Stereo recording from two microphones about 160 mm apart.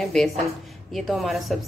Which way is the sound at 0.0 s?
5° left (ahead or behind).